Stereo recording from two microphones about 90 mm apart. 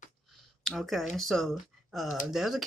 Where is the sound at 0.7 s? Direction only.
Centre (ahead or behind).